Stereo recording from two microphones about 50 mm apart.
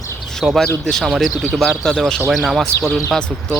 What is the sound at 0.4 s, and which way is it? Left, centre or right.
Speech, centre.